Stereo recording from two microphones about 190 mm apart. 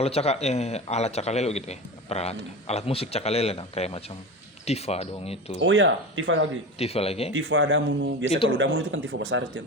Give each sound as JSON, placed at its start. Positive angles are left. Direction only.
{"t": 0.0, "sound": "speech", "side_deg": 35}
{"t": 5.5, "sound": "speech", "side_deg": -85}
{"t": 6.7, "sound": "speech", "side_deg": 30}
{"t": 7.3, "sound": "speech", "side_deg": -85}